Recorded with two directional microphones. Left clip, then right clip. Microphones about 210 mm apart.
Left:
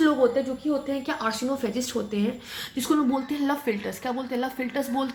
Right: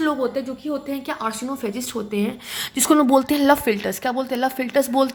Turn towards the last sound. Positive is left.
turn(degrees=-35)  # may be behind; listen again after turning